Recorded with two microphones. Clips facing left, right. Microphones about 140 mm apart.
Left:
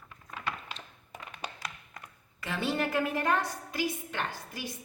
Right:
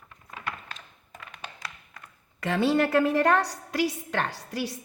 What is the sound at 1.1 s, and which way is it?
Tap, 15° left (ahead or behind).